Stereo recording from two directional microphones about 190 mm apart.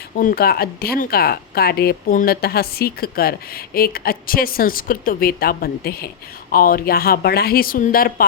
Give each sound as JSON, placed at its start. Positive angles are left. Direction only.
{"t": 0.2, "sound": "speech", "side_deg": 50}